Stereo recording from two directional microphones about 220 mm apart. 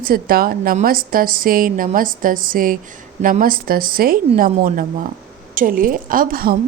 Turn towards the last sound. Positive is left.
turn(degrees=-40)  # may be behind; listen again after turning